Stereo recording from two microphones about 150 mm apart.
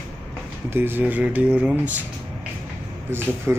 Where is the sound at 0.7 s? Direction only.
15° right (ahead or behind).